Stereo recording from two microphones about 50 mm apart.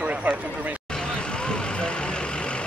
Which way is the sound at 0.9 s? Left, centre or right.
Centre.